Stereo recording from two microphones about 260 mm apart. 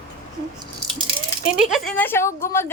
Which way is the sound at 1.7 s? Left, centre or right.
Centre.